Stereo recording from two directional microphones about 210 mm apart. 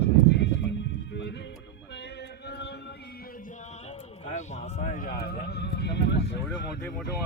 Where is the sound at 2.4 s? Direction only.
55° left (ahead or behind).